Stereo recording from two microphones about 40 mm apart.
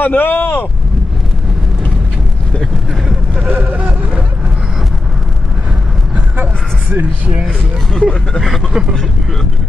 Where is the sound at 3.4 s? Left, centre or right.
Right.